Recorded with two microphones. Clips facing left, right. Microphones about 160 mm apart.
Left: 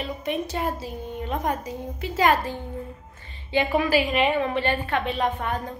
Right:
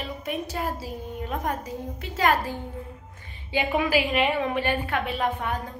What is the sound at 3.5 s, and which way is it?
A woman's voice, 10° right (ahead or behind).